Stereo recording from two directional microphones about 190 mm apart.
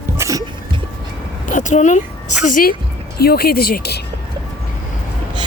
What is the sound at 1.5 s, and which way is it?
A woman's voice, 40° left (ahead or behind).